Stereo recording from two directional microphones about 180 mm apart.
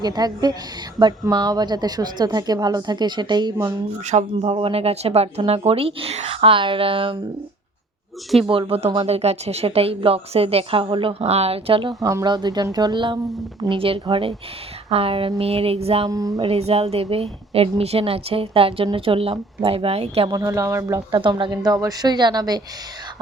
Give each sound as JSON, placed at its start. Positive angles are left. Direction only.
{"t": 0.0, "sound": "a woman's voice", "side_deg": -20}
{"t": 4.0, "sound": "speech", "side_deg": -40}
{"t": 8.4, "sound": "a woman's voice", "side_deg": -30}
{"t": 16.0, "sound": "a woman's voice", "side_deg": -20}
{"t": 16.5, "sound": "speech", "side_deg": -35}
{"t": 20.3, "sound": "a woman's voice", "side_deg": -20}